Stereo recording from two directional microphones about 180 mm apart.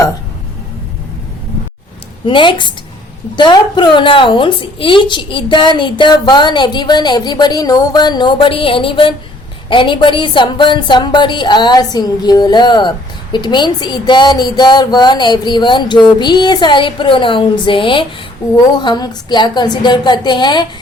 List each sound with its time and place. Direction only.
2.2 s a woman's voice: 30° left (ahead or behind)